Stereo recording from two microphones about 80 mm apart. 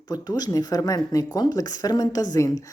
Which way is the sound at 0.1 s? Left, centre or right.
Left.